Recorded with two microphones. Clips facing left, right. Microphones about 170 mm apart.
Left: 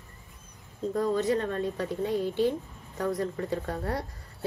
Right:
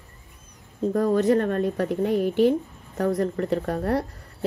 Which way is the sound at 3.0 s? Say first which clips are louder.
Right 6 dB; 55° right (ahead or behind).